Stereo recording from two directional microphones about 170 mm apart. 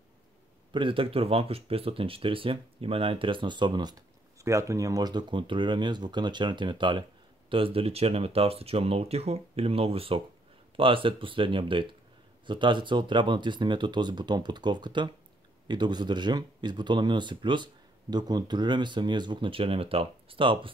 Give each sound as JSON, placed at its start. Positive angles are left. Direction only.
{"t": 0.7, "sound": "speech", "side_deg": -30}